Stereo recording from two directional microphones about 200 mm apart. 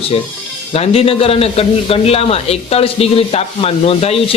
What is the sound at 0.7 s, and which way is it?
Speech, 30° left (ahead or behind).